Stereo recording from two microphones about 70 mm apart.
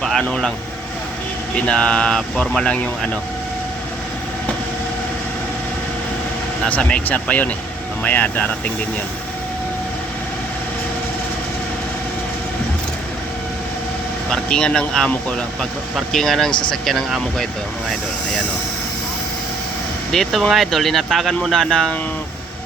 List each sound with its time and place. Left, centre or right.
0.0 s speech: centre
1.5 s speech: centre
6.7 s speech: centre
14.3 s speech: centre
20.1 s speech: centre